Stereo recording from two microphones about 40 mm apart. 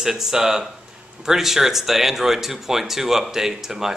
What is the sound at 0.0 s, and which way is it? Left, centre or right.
Speech, centre.